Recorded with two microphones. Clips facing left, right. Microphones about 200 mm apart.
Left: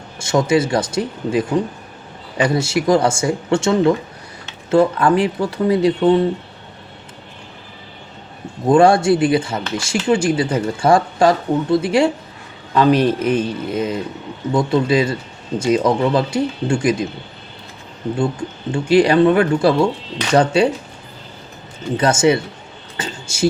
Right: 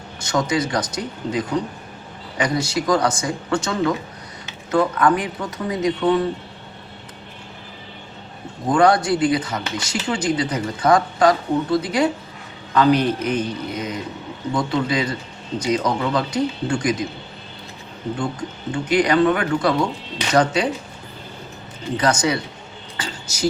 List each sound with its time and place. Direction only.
0.2 s speech: 25° left (ahead or behind)
8.7 s speech: 25° left (ahead or behind)
18.2 s speech: 25° left (ahead or behind)
21.9 s speech: 25° left (ahead or behind)
23.0 s a sound: 25° left (ahead or behind)